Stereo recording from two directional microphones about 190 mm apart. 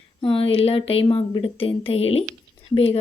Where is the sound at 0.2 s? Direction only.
30° left (ahead or behind).